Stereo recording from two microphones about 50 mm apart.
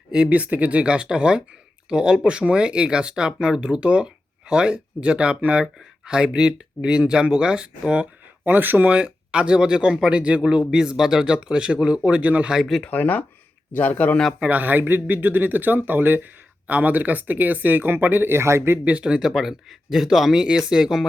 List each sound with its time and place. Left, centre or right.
0.1 s speech: right
8.4 s speech: right
8.9 s speech: right
12.9 s a man's voice: left
14.4 s speech: right
18.9 s speech: right
19.2 s speech: centre